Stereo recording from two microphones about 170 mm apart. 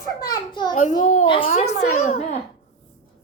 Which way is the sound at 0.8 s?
45° left (ahead or behind).